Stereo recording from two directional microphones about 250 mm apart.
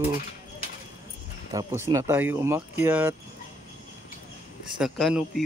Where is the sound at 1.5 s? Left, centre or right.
Centre.